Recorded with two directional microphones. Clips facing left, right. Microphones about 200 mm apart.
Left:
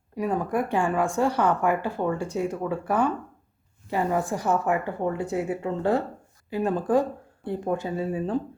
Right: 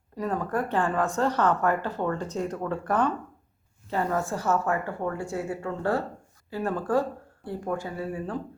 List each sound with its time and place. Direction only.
0.2 s speech: 15° left (ahead or behind)